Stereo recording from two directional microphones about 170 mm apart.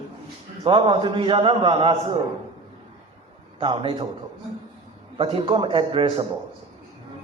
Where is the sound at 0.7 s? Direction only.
30° right (ahead or behind).